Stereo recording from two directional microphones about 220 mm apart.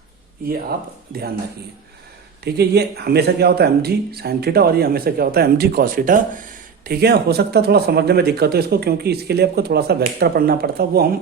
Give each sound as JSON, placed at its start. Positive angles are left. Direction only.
{"t": 0.4, "sound": "speech", "side_deg": -45}
{"t": 2.4, "sound": "speech", "side_deg": -45}